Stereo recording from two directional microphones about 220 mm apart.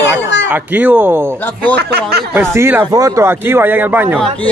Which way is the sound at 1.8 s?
45° right (ahead or behind).